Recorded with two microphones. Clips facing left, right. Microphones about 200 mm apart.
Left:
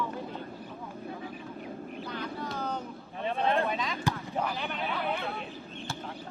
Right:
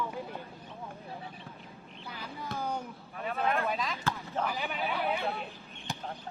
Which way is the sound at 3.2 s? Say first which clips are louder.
Left 3 dB; 30° left (ahead or behind).